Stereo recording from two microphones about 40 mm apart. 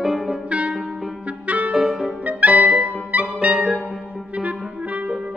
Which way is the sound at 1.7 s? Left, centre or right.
Centre.